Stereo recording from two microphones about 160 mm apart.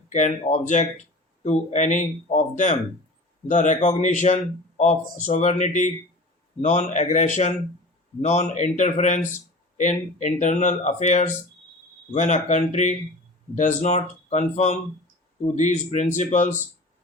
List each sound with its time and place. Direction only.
0.1 s speech: 50° left (ahead or behind)